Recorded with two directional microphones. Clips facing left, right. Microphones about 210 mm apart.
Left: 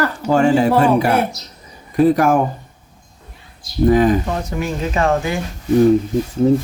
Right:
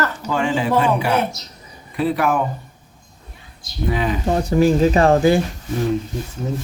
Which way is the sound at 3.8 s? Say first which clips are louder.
Left 9 dB; 45° left (ahead or behind).